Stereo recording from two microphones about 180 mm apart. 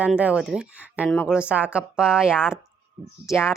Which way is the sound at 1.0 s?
10° left (ahead or behind).